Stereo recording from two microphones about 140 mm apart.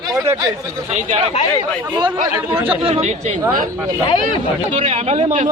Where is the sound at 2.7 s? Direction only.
45° right (ahead or behind).